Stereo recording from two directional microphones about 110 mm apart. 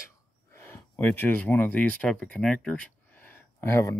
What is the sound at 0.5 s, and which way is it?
Speech, 20° left (ahead or behind).